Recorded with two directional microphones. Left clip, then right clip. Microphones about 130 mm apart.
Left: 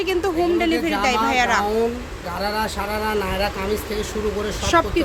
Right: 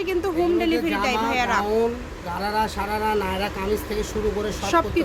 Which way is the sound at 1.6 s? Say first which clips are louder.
Left 1 dB; 15° right (ahead or behind).